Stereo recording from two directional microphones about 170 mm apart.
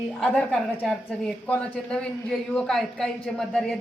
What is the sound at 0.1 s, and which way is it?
A woman's voice, 5° left (ahead or behind).